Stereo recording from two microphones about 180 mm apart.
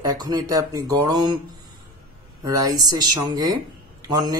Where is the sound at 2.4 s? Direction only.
20° right (ahead or behind).